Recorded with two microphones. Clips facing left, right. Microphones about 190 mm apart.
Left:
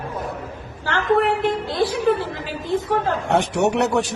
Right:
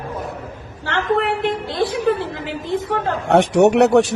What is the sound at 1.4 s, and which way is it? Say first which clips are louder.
Speech: even; 25° right (ahead or behind).